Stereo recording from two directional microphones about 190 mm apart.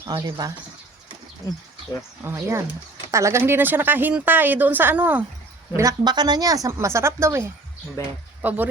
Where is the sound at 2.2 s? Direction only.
15° right (ahead or behind).